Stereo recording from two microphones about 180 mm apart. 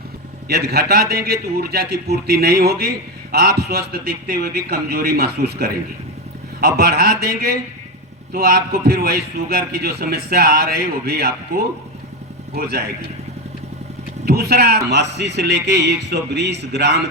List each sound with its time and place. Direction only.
0.4 s a man's voice: 60° right (ahead or behind)
14.3 s a man's voice: 60° right (ahead or behind)